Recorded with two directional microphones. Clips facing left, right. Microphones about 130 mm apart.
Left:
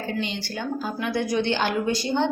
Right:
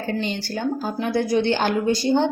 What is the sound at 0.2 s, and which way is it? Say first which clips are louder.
A woman's voice: right 4 dB; 40° right (ahead or behind).